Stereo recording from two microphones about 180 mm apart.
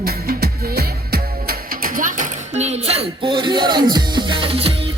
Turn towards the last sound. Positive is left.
turn(degrees=-30)  # may be behind; listen again after turning